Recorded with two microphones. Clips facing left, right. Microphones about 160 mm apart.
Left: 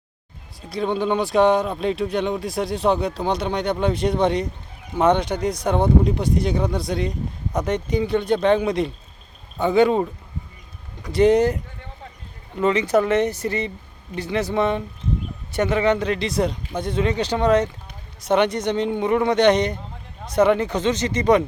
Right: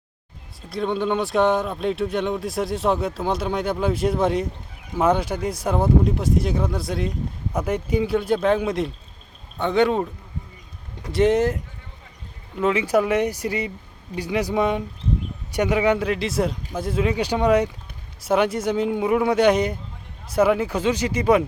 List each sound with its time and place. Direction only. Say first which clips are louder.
0.7 s speech: left 1 dB; centre (ahead or behind)
11.1 s speech: left 2 dB; centre (ahead or behind)